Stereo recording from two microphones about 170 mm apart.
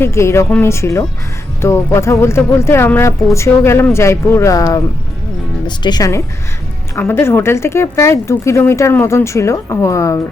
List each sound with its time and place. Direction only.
0.0 s speech: 15° left (ahead or behind)